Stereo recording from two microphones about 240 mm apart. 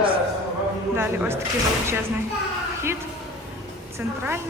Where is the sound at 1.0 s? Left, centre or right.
Centre.